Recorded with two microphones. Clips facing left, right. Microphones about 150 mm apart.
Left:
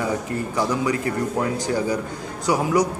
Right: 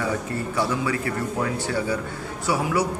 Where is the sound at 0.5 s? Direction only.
15° left (ahead or behind).